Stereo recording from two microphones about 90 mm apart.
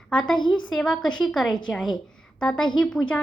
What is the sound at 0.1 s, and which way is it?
Speech, 10° left (ahead or behind).